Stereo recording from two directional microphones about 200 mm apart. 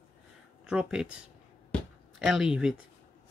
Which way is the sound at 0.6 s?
5° right (ahead or behind).